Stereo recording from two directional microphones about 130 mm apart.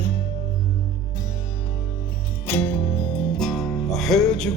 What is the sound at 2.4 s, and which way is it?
Music, 15° left (ahead or behind).